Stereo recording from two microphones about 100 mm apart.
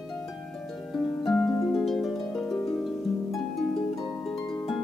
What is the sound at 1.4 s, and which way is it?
Harp, 30° left (ahead or behind).